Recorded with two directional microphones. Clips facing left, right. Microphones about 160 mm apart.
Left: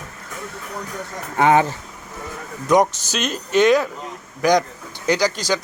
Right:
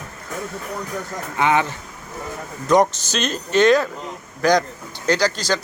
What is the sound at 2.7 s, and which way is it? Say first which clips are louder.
Speech: even; 10° left (ahead or behind).